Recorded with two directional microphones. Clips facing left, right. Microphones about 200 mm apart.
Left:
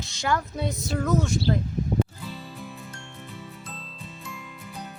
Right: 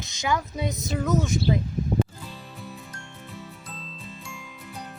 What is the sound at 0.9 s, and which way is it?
Speech, centre (ahead or behind).